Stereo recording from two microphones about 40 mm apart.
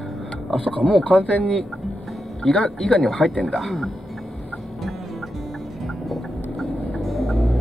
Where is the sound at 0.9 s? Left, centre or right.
Left.